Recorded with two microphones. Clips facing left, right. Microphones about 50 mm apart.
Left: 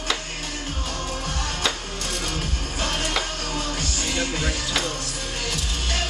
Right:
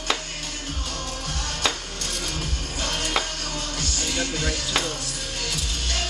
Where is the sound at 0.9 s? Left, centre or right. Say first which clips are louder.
Left 4 dB; centre.